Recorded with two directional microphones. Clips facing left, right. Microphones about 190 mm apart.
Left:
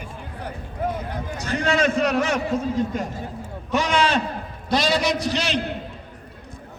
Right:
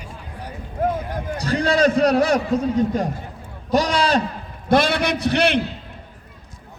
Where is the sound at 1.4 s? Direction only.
35° right (ahead or behind).